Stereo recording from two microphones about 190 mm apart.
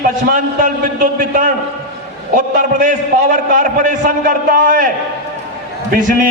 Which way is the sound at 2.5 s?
45° right (ahead or behind).